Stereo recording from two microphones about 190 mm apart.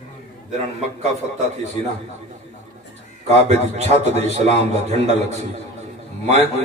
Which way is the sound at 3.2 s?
35° right (ahead or behind).